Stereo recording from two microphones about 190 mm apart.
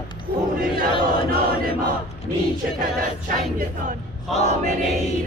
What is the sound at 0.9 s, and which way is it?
Choir, 30° left (ahead or behind).